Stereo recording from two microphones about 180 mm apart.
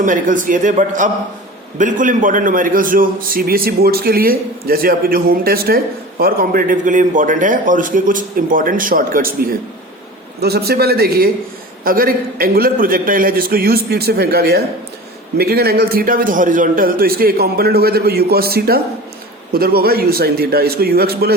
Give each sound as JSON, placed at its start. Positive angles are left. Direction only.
{"t": 0.0, "sound": "a man's voice", "side_deg": -45}